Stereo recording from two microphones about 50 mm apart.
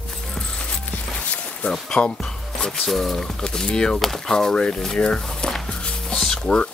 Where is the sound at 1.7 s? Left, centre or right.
Centre.